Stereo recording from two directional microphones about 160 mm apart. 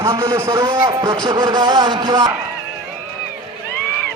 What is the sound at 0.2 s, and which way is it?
A man's voice, 20° right (ahead or behind).